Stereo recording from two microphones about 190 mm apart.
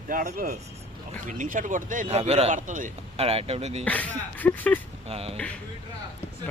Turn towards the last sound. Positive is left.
turn(degrees=-30)  # may be behind; listen again after turning